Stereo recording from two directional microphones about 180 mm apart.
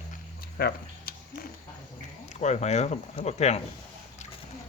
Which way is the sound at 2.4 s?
40° left (ahead or behind).